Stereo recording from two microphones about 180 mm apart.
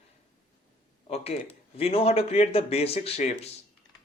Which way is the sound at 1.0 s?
35° left (ahead or behind).